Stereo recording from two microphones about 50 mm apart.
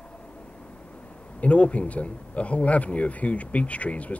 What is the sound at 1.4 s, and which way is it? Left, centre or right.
Speech, left.